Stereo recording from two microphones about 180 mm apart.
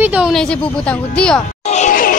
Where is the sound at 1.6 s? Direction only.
40° left (ahead or behind).